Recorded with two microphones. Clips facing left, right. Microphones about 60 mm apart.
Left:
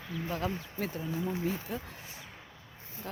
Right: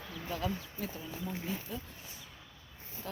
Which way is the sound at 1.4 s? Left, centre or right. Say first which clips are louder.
Left 5 dB; left.